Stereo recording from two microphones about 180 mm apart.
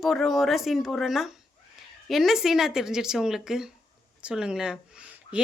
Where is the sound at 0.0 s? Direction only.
Centre (ahead or behind).